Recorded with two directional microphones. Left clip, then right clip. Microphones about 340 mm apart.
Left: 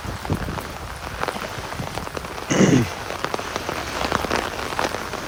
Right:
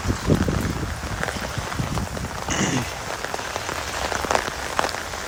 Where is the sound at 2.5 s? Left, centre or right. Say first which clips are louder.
Left 6 dB; centre.